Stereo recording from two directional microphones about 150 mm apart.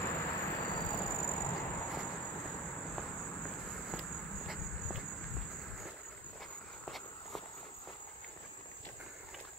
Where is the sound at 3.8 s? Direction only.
Centre (ahead or behind).